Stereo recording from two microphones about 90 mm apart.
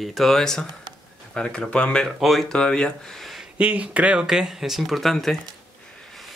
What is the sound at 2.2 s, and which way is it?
Speech, centre (ahead or behind).